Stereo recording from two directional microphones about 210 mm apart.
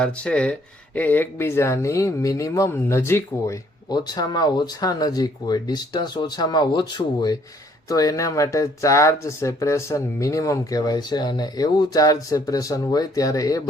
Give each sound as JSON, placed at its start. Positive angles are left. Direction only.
{"t": 0.0, "sound": "speech", "side_deg": 5}